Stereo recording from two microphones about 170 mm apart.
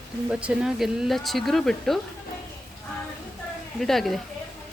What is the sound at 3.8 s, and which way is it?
Speech, centre (ahead or behind).